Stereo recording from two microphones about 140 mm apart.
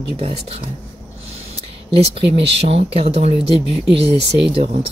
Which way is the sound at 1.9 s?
45° right (ahead or behind).